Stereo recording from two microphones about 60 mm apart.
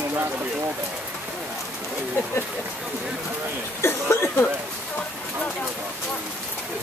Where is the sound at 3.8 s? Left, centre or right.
Left.